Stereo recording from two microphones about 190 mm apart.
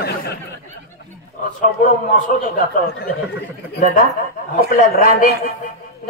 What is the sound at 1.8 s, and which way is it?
A man's voice, 45° left (ahead or behind).